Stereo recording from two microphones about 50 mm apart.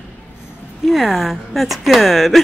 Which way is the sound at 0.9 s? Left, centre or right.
Centre.